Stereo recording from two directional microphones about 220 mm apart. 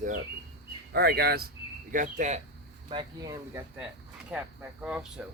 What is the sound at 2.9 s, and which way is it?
Speech, 20° right (ahead or behind).